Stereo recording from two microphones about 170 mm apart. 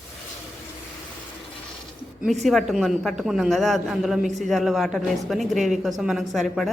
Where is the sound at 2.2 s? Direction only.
Centre (ahead or behind).